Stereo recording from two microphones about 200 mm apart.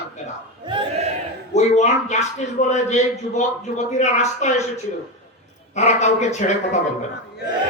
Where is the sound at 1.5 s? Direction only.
35° left (ahead or behind).